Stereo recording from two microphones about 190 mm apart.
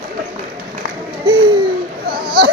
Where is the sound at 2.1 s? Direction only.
50° right (ahead or behind).